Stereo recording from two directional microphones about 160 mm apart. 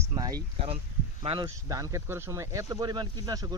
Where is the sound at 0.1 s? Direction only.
25° right (ahead or behind).